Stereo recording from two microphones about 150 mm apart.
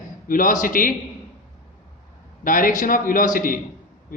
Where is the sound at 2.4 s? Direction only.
65° left (ahead or behind).